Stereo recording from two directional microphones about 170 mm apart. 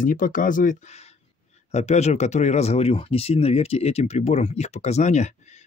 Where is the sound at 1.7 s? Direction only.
40° left (ahead or behind).